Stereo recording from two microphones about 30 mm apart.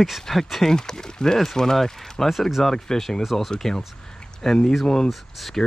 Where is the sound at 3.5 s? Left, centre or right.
Centre.